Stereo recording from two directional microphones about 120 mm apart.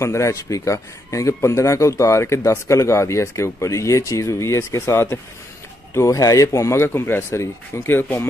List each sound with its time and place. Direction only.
0.0 s speech: 25° left (ahead or behind)